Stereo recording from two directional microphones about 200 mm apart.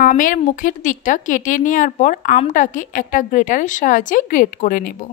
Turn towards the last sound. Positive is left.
turn(degrees=45)  # may be behind; listen again after turning